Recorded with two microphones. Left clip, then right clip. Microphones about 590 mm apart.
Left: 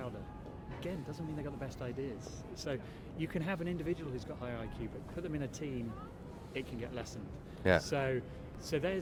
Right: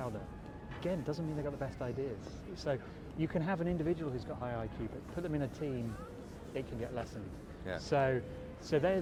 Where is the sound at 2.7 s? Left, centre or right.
Centre.